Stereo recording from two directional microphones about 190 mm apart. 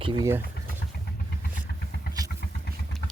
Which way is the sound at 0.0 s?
20° right (ahead or behind).